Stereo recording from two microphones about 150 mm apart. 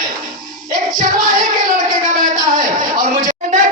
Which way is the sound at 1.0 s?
60° right (ahead or behind).